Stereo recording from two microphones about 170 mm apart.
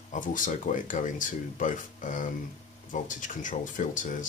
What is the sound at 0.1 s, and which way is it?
Speech, 50° left (ahead or behind).